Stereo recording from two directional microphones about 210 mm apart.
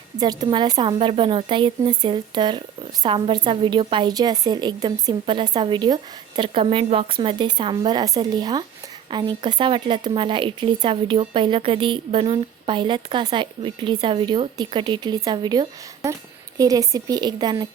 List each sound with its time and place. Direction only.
0.2 s speech: 20° right (ahead or behind)